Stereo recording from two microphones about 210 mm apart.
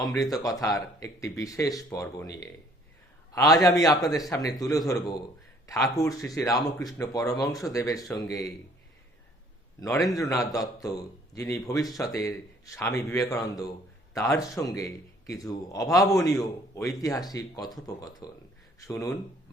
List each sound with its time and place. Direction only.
0.2 s a man's voice: 15° left (ahead or behind)
10.1 s a man's voice: 15° left (ahead or behind)
12.9 s a man's voice: centre (ahead or behind)
13.1 s a man's voice: 15° left (ahead or behind)